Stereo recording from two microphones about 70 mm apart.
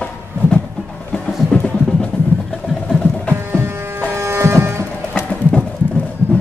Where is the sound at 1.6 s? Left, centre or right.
Centre.